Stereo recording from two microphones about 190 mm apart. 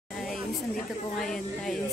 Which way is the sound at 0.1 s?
Centre (ahead or behind).